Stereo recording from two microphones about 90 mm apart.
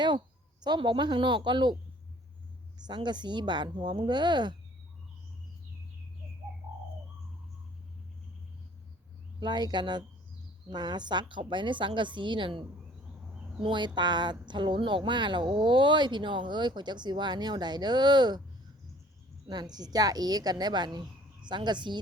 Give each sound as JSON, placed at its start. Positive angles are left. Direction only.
{"t": 0.6, "sound": "speech", "side_deg": -55}
{"t": 2.7, "sound": "speech", "side_deg": -55}
{"t": 9.4, "sound": "speech", "side_deg": -55}
{"t": 19.5, "sound": "a woman's voice", "side_deg": -50}